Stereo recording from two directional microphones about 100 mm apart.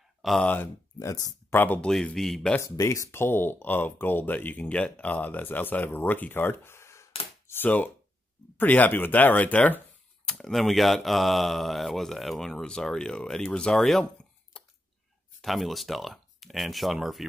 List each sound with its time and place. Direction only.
0.2 s speech: centre (ahead or behind)
0.9 s speech: 35° left (ahead or behind)
1.5 s speech: 20° left (ahead or behind)
1.9 s speech: 5° left (ahead or behind)
2.8 s speech: 30° left (ahead or behind); by 9.8 s 15° left (ahead or behind)
10.2 s speech: 5° left (ahead or behind)
14.5 s a sound: 10° left (ahead or behind)
15.4 s speech: centre (ahead or behind)